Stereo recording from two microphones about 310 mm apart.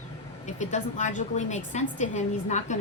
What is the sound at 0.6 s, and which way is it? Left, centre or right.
A woman's voice, left.